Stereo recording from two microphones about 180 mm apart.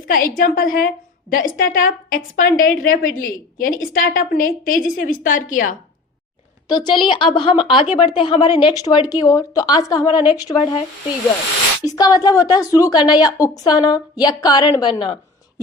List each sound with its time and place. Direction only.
0.1 s a woman's voice: 50° left (ahead or behind)
6.7 s a woman's voice: 25° left (ahead or behind)
11.9 s a woman's voice: 20° left (ahead or behind)